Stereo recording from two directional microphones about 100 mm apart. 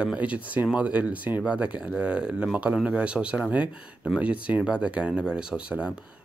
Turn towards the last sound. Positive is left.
turn(degrees=-10)  # may be behind; listen again after turning